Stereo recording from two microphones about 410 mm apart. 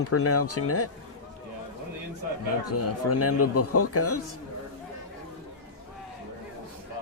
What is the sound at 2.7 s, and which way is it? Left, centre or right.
Speech, left.